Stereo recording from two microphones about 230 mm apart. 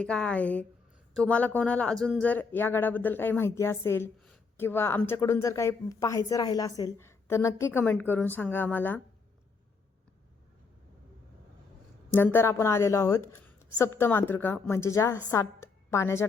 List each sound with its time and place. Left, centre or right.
0.0 s speech: centre
12.1 s a woman's voice: centre